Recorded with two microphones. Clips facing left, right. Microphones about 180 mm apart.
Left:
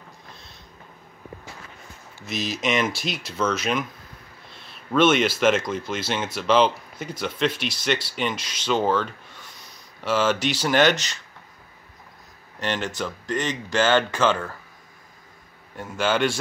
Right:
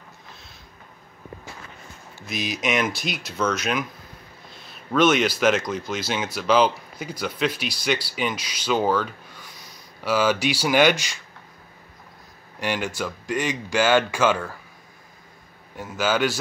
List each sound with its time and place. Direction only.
2.2 s speech: centre (ahead or behind)
12.5 s speech: 10° right (ahead or behind)
15.7 s speech: 5° right (ahead or behind)